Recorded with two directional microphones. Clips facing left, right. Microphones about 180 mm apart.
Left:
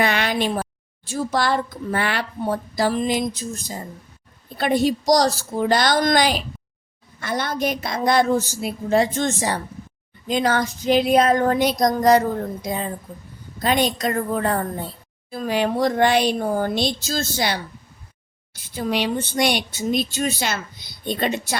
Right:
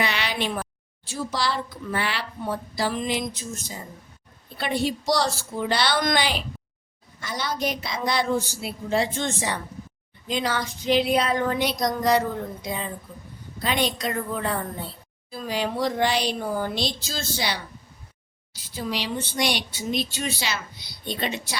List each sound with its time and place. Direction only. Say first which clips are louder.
0.0 s a woman's voice: left 6 dB; 50° left (ahead or behind)
7.2 s a woman's voice: left 5 dB; 55° left (ahead or behind)